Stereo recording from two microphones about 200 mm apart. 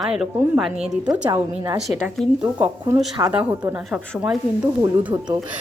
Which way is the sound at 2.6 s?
15° right (ahead or behind).